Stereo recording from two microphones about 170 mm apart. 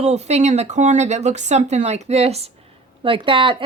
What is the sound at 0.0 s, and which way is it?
A woman's voice, 40° right (ahead or behind).